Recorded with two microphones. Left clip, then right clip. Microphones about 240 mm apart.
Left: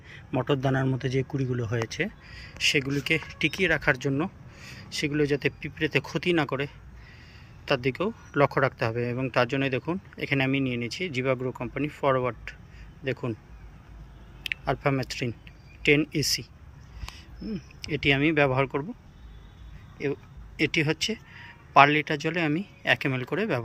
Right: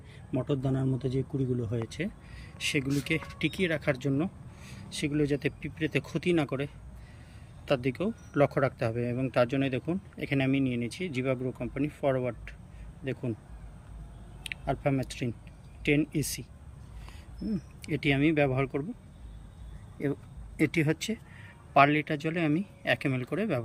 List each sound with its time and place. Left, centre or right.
0.4 s a man's voice: left
1.9 s speech: centre
7.7 s speech: centre
14.4 s speech: centre
17.5 s speech: centre
20.6 s speech: centre